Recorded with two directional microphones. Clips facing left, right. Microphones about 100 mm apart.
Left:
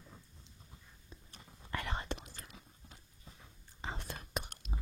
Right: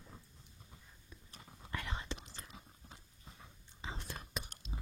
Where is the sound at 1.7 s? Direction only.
60° left (ahead or behind).